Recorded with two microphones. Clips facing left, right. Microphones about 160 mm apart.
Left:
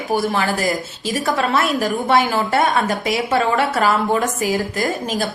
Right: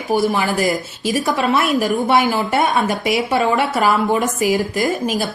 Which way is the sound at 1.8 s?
15° right (ahead or behind).